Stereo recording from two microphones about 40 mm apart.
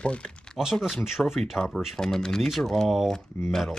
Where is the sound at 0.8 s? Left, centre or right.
Centre.